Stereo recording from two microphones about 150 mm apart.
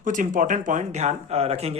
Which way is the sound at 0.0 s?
60° right (ahead or behind).